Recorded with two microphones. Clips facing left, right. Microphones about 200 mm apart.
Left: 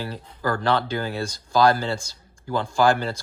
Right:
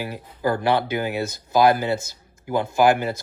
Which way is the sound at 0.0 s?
10° right (ahead or behind).